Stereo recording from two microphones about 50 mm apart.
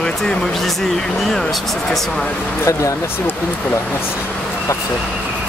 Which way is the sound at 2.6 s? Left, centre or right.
Left.